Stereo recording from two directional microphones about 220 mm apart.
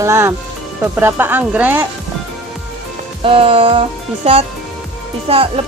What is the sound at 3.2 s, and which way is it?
Speech, 25° right (ahead or behind).